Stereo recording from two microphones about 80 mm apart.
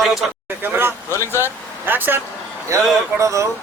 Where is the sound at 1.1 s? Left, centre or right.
Left.